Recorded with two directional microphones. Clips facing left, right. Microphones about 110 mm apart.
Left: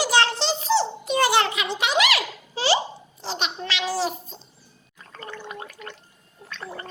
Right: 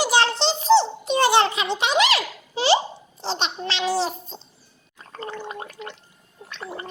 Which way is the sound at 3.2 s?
30° right (ahead or behind).